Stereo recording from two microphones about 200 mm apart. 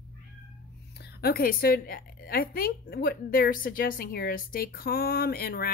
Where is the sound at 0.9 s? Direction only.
55° left (ahead or behind).